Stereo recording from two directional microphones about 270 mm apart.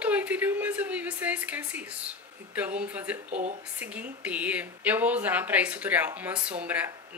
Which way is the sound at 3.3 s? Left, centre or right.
Right.